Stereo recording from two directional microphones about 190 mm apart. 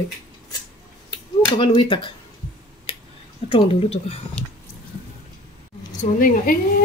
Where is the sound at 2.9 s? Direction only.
30° left (ahead or behind).